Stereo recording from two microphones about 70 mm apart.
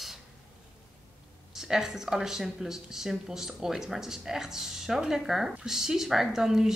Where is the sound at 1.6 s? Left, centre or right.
Centre.